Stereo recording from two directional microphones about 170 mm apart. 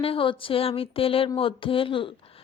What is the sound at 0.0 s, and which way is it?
Speech, 30° left (ahead or behind).